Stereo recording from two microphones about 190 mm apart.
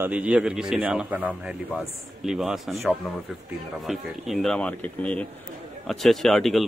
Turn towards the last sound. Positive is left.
turn(degrees=0)  # may be behind; listen again after turning